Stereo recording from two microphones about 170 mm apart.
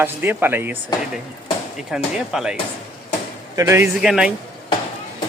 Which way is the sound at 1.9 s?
Centre (ahead or behind).